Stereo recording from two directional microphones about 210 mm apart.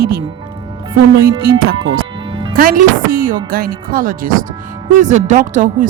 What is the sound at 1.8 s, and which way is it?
Speech, 70° right (ahead or behind).